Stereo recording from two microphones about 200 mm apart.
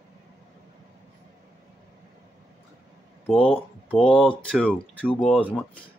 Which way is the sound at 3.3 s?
25° left (ahead or behind).